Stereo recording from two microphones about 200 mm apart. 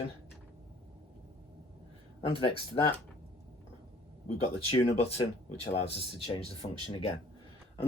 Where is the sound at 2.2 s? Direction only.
30° left (ahead or behind).